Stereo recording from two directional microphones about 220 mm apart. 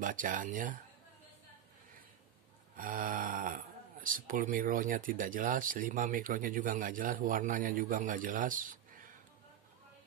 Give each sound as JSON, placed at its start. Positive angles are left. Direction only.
{"t": 0.0, "sound": "speech", "side_deg": -35}
{"t": 2.8, "sound": "speech", "side_deg": -40}